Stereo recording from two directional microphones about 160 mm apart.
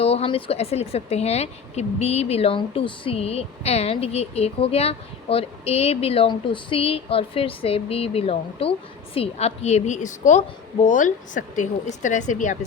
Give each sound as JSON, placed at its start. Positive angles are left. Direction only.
{"t": 0.0, "sound": "a woman's voice", "side_deg": 40}